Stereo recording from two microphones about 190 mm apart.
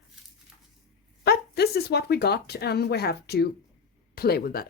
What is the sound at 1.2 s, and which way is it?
A woman's voice, 55° left (ahead or behind).